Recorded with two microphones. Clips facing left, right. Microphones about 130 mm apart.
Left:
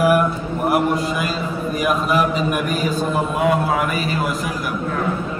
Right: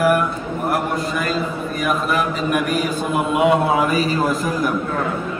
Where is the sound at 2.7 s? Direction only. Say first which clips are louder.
Even; 55° right (ahead or behind).